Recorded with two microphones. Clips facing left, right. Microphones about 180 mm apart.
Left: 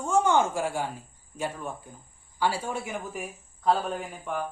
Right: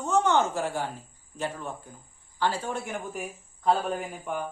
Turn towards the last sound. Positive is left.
turn(degrees=0)  # may be behind; listen again after turning